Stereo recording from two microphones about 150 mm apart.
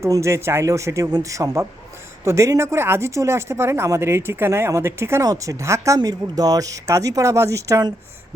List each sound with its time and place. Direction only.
0.0 s speech: 20° right (ahead or behind)